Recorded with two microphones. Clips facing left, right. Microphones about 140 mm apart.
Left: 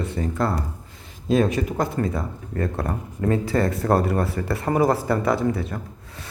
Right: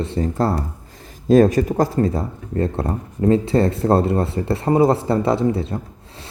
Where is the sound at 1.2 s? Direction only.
45° right (ahead or behind).